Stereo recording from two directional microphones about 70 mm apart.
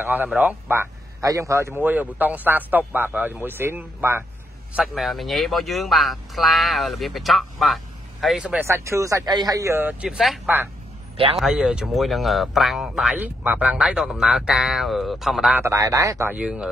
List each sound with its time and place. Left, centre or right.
0.0 s speech: right
1.2 s speech: right
1.7 s speech: right
4.9 s speech: centre
8.5 s speech: right
9.3 s speech: right
9.8 s speech: right
10.0 s speech: centre
13.2 s speech: right
13.7 s speech: centre
15.6 s speech: right
16.3 s speech: centre